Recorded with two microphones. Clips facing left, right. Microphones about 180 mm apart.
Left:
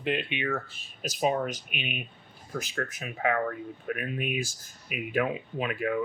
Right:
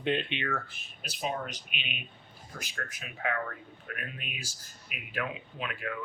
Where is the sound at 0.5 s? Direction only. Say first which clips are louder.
Left 3 dB; 40° left (ahead or behind).